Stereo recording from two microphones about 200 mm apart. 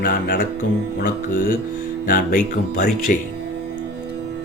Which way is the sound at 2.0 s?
45° left (ahead or behind).